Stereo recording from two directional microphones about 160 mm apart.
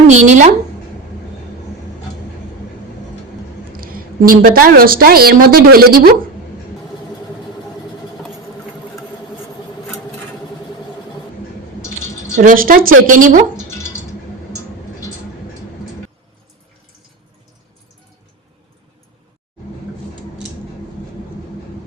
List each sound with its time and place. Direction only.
0.1 s a woman's voice: 50° right (ahead or behind)
3.7 s a woman's voice: 65° right (ahead or behind)
12.4 s speech: 60° right (ahead or behind)